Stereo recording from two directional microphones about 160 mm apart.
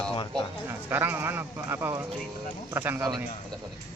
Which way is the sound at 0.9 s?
15° right (ahead or behind).